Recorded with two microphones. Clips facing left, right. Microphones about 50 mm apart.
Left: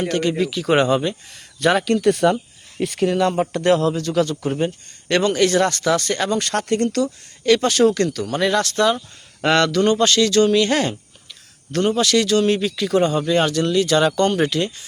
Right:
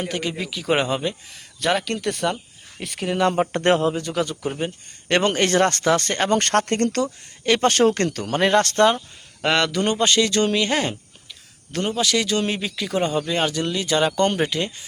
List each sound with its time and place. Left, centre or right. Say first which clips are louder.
0.0 s speech: left 7 dB; centre
3.5 s speech: left 2 dB; right
3.8 s speech: left 3 dB; right
4.4 s speech: left 4 dB; centre
5.0 s speech: left 2 dB; right
6.3 s speech: right 4 dB; right
7.0 s speech: left 3 dB; right
9.4 s speech: left 4 dB; centre
9.8 s speech: left 3 dB; right